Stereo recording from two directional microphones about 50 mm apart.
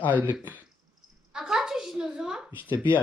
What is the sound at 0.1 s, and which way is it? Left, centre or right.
Speech, right.